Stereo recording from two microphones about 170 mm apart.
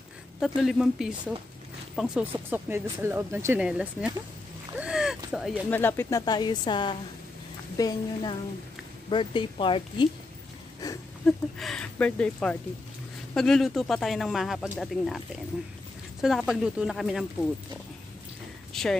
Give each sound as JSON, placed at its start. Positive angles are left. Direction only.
{"t": 0.7, "sound": "speech", "side_deg": -5}
{"t": 4.7, "sound": "a sound", "side_deg": -5}
{"t": 5.7, "sound": "speech", "side_deg": 10}
{"t": 11.2, "sound": "speech", "side_deg": 5}
{"t": 18.7, "sound": "speech", "side_deg": 5}